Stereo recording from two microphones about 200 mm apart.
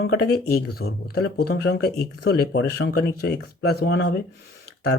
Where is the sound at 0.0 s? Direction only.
55° left (ahead or behind).